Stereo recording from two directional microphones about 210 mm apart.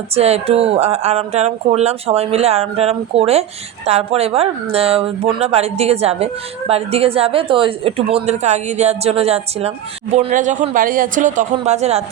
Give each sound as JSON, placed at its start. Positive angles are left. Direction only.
{"t": 0.1, "sound": "speech", "side_deg": -30}